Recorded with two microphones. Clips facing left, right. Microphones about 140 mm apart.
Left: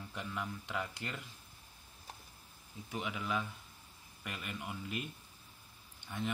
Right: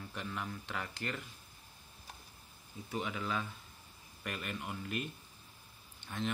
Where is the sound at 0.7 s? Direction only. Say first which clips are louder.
Even; 15° left (ahead or behind).